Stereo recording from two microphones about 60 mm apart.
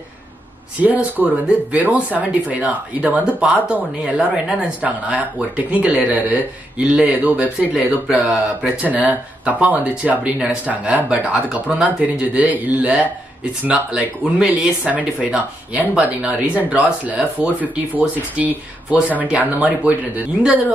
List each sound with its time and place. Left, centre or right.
0.7 s speech: right
4.8 s speech: right
8.8 s speech: right
14.8 s speech: right